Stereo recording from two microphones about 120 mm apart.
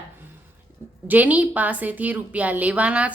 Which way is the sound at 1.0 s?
15° right (ahead or behind).